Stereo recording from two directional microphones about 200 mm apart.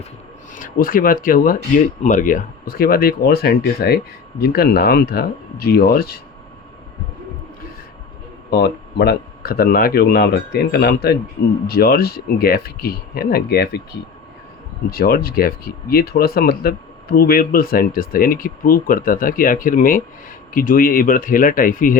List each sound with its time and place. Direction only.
0.5 s speech: 45° left (ahead or behind)
8.4 s speech: 55° left (ahead or behind)
14.8 s speech: 50° left (ahead or behind)